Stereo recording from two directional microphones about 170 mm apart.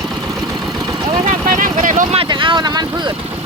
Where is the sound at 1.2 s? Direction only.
50° right (ahead or behind).